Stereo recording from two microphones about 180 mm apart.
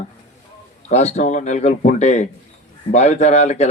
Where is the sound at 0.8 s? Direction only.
40° left (ahead or behind).